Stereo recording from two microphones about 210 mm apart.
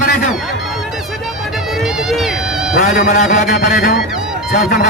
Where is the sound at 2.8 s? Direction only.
50° left (ahead or behind).